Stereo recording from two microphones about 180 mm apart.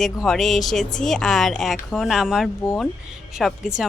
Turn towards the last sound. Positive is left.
turn(degrees=0)  # may be behind; listen again after turning